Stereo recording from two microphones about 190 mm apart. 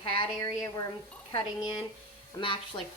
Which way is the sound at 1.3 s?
30° left (ahead or behind).